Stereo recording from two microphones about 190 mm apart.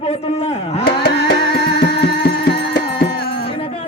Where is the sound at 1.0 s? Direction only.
60° left (ahead or behind).